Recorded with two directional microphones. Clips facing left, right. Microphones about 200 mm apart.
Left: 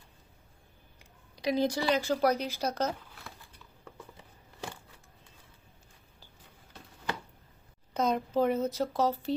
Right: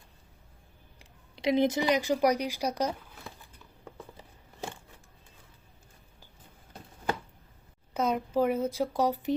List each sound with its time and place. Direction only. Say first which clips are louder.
0.9 s speech: right 3 dB; 25° right (ahead or behind)
7.9 s speech: even; 10° right (ahead or behind)